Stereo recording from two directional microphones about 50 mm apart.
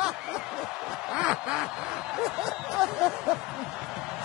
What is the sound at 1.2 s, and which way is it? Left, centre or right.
Speech, centre.